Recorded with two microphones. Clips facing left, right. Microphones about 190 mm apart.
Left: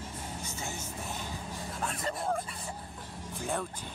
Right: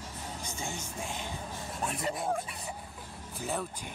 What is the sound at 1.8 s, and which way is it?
Speech, 5° right (ahead or behind).